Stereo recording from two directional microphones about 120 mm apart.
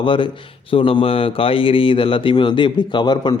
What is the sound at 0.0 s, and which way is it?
A man's voice, 45° left (ahead or behind).